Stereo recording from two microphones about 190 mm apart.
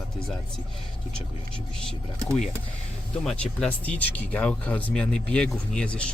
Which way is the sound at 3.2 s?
5° left (ahead or behind).